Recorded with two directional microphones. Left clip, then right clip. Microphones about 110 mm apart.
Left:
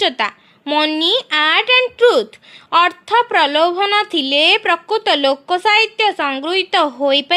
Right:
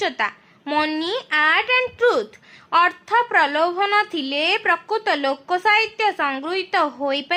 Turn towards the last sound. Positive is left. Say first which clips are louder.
# left 7 dB
turn(degrees=60)  # may be behind; listen again after turning